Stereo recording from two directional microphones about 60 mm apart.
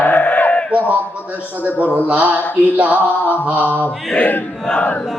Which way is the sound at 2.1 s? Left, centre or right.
Right.